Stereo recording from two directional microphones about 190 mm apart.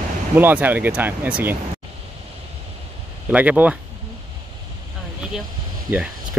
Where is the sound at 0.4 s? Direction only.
10° right (ahead or behind).